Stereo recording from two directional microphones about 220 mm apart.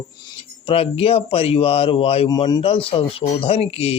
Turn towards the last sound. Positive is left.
turn(degrees=25)  # may be behind; listen again after turning